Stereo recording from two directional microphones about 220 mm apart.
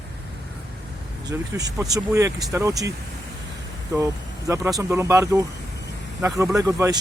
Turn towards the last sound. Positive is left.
turn(degrees=-15)  # may be behind; listen again after turning